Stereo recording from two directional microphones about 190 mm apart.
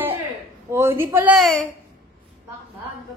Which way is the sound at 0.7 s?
15° right (ahead or behind).